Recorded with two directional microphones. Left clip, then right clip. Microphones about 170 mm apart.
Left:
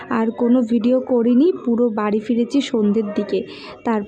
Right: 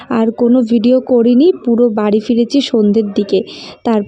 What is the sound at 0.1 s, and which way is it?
Speech, 35° right (ahead or behind).